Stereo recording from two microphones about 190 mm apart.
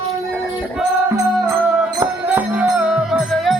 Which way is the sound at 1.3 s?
5° right (ahead or behind).